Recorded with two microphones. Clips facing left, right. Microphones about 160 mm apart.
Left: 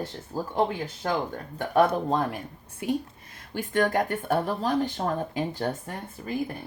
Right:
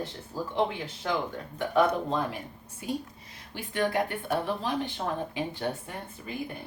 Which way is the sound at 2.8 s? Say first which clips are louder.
Left 5 dB; 55° left (ahead or behind).